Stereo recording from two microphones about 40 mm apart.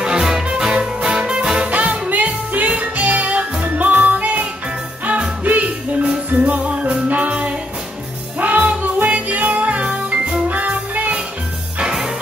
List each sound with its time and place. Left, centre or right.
0.0 s music: centre
1.7 s music: right
11.8 s music: centre